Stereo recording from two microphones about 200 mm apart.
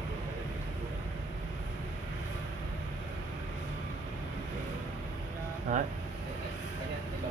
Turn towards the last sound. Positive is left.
turn(degrees=-40)  # may be behind; listen again after turning